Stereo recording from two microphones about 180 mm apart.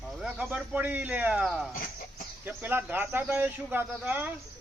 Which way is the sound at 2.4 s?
10° right (ahead or behind).